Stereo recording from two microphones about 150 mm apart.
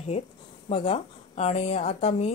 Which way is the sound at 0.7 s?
40° left (ahead or behind).